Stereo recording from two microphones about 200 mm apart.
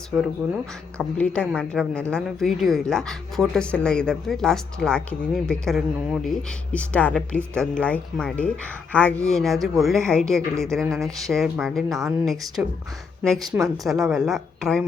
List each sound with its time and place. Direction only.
0.9 s a woman's voice: 5° left (ahead or behind)